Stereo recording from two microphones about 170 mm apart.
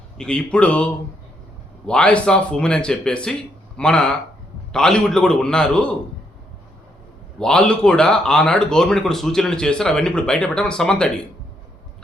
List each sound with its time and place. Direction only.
0.2 s speech: 5° left (ahead or behind)
7.3 s speech: 5° left (ahead or behind)